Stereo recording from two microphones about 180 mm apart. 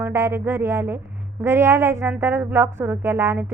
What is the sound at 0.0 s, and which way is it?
Speech, 15° right (ahead or behind).